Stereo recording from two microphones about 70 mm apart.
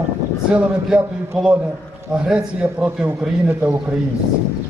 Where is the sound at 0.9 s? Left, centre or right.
Centre.